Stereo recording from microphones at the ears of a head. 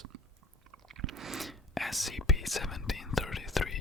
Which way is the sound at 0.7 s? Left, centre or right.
Right.